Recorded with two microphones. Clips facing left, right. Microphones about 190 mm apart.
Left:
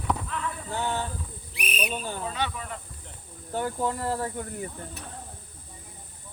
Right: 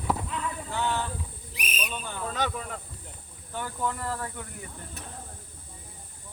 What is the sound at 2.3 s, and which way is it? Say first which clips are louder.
Speech: right 1 dB; 45° right (ahead or behind).